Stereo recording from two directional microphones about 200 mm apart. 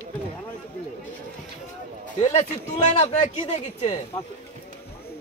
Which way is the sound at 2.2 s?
35° left (ahead or behind).